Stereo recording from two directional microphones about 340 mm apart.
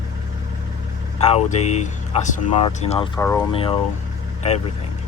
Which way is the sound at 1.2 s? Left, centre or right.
Centre.